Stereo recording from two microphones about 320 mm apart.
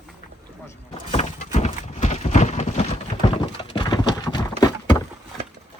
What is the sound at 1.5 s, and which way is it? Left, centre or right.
Clip-clop, left.